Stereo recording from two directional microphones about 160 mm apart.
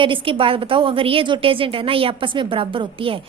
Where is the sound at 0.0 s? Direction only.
30° right (ahead or behind).